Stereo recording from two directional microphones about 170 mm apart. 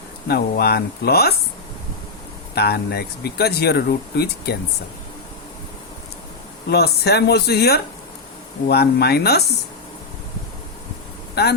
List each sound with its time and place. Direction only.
0.3 s speech: 70° left (ahead or behind)
2.6 s speech: 70° left (ahead or behind)
6.7 s speech: 70° left (ahead or behind)